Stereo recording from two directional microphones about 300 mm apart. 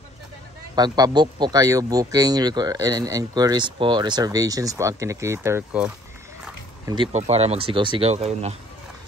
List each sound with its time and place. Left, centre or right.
0.7 s speech: centre
6.4 s a sound: centre
7.1 s speech: right